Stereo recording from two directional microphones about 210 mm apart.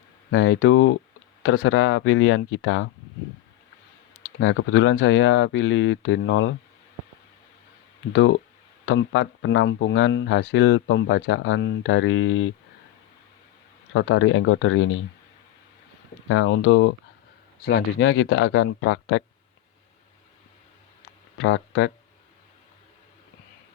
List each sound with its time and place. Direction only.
0.3 s speech: 65° left (ahead or behind)
4.4 s speech: 65° left (ahead or behind)
8.1 s speech: 65° left (ahead or behind)
13.9 s speech: 65° left (ahead or behind)
16.3 s speech: 70° left (ahead or behind)
17.6 s speech: 50° left (ahead or behind); by 19.2 s 70° left (ahead or behind)
21.3 s speech: 65° left (ahead or behind)